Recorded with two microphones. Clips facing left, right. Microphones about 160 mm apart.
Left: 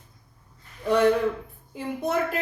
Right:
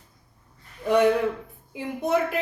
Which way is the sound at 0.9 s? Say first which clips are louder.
Right 1 dB; 15° right (ahead or behind).